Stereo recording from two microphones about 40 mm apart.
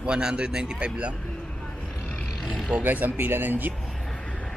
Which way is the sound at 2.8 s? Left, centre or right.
Right.